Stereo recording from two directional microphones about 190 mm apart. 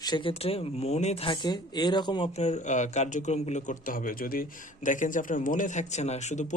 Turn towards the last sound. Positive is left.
turn(degrees=40)  # may be behind; listen again after turning